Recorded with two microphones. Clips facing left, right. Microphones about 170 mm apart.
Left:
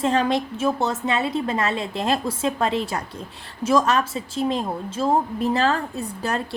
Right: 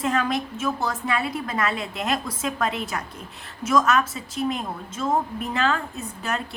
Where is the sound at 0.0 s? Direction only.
30° left (ahead or behind).